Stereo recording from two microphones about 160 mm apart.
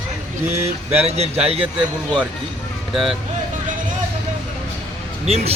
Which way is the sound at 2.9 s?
Centre (ahead or behind).